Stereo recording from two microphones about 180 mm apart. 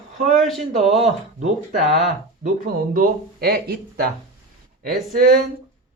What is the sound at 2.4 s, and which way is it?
Speech, 50° right (ahead or behind).